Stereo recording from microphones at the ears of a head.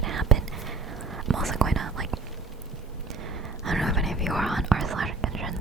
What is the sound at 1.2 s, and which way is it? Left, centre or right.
Whispering, right.